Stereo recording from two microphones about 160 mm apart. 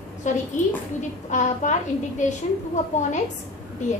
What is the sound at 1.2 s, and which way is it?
Speech, 50° left (ahead or behind).